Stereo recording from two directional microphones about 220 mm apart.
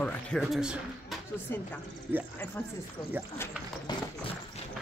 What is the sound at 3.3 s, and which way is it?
Horse, 20° left (ahead or behind).